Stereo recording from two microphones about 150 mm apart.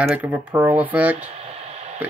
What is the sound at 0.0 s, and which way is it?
Speech, 10° right (ahead or behind).